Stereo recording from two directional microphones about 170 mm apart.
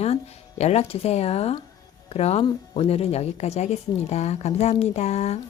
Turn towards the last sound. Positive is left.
turn(degrees=40)  # may be behind; listen again after turning